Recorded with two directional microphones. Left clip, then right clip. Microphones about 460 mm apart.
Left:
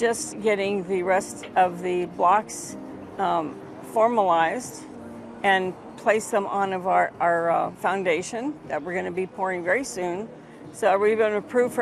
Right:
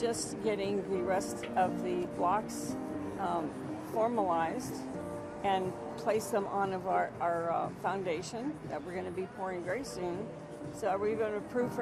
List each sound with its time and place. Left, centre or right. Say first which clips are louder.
0.0 s speech: left 10 dB; left